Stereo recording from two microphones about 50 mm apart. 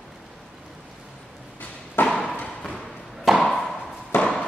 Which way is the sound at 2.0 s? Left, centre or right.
Centre.